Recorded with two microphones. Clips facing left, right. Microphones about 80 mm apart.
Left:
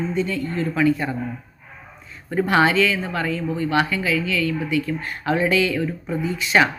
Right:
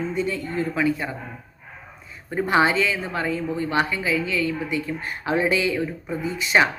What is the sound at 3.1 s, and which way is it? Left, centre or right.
A woman's voice, centre.